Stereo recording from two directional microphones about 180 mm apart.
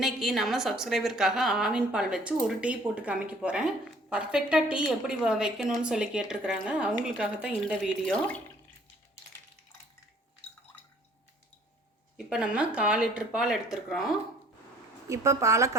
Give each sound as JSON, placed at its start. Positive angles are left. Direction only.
{"t": 0.0, "sound": "a woman's voice", "side_deg": 0}
{"t": 12.3, "sound": "a woman's voice", "side_deg": -5}
{"t": 15.0, "sound": "speech", "side_deg": -15}